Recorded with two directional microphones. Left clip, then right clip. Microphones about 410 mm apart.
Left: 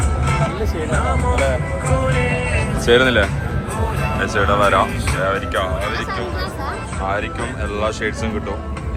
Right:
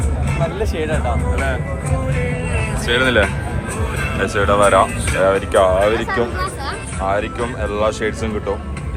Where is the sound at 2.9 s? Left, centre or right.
Centre.